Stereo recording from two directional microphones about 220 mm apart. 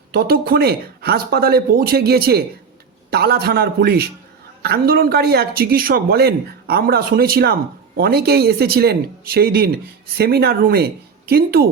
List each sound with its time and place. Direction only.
0.1 s speech: 45° right (ahead or behind)